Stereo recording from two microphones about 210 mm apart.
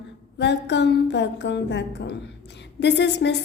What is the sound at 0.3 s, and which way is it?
A woman's voice, 55° left (ahead or behind).